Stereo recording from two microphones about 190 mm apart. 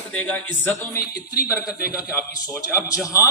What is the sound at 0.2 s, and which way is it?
A man's voice, 10° left (ahead or behind).